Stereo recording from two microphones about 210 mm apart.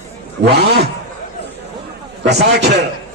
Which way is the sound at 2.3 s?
55° right (ahead or behind).